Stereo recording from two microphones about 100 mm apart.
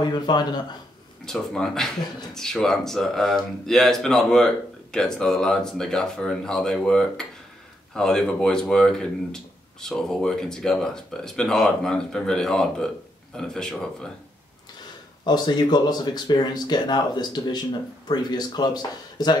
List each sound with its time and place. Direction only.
0.0 s speech: 45° left (ahead or behind)
1.2 s speech: 5° left (ahead or behind)
15.2 s speech: 45° left (ahead or behind)